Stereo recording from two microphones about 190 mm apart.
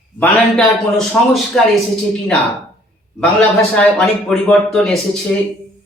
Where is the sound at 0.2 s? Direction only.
5° left (ahead or behind).